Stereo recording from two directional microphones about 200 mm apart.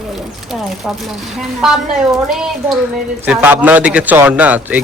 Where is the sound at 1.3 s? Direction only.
Centre (ahead or behind).